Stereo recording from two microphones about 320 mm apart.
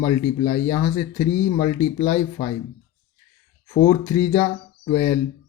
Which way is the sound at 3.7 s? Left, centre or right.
Centre.